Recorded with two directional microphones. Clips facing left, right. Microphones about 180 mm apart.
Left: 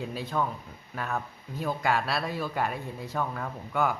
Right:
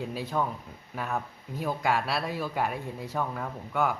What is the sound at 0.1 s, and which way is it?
Speech, 10° right (ahead or behind).